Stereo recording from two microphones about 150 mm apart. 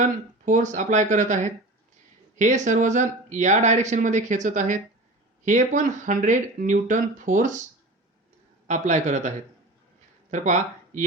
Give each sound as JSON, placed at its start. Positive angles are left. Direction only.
{"t": 0.0, "sound": "speech", "side_deg": -55}
{"t": 8.6, "sound": "speech", "side_deg": -55}
{"t": 10.3, "sound": "speech", "side_deg": -55}